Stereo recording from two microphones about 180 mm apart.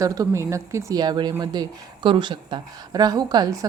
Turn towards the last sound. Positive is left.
turn(degrees=-20)  # may be behind; listen again after turning